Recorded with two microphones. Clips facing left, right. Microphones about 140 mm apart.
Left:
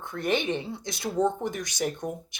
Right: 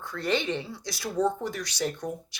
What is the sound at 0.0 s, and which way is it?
Speech, 20° left (ahead or behind).